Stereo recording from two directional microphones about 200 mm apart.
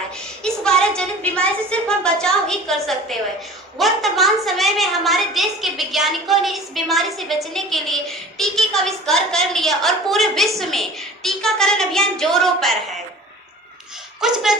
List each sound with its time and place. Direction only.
0.4 s a sound: 5° left (ahead or behind)
1.7 s a woman's voice: 5° left (ahead or behind)
14.2 s a woman's voice: centre (ahead or behind)